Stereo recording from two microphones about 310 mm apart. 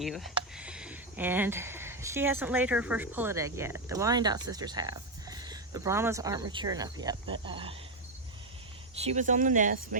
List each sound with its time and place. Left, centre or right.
0.0 s speech: centre
9.0 s speech: right